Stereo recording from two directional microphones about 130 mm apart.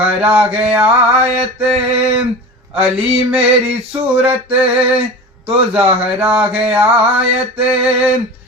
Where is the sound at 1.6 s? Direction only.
50° right (ahead or behind).